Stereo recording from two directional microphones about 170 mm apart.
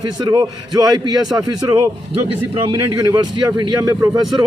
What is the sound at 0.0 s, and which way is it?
A man's voice, 25° right (ahead or behind).